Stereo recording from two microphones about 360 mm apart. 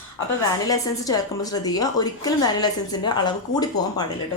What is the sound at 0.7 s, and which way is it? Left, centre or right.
A woman's voice, centre.